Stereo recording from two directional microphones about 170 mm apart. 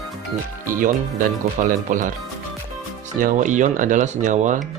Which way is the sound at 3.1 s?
50° right (ahead or behind).